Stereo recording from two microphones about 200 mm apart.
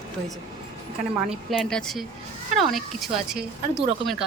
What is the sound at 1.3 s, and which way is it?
Speech, centre (ahead or behind).